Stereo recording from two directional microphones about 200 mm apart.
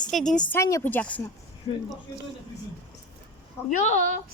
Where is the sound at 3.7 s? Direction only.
35° left (ahead or behind).